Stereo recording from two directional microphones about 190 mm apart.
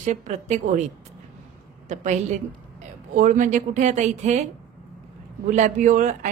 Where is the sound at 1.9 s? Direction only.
40° right (ahead or behind).